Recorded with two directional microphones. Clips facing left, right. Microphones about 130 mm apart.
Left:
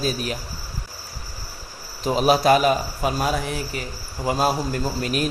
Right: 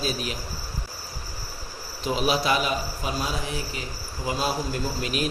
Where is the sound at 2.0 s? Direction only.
45° left (ahead or behind).